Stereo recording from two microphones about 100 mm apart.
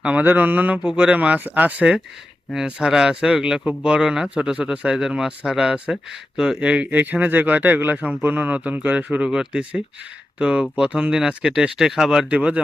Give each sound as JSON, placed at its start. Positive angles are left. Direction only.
{"t": 0.0, "sound": "speech", "side_deg": -15}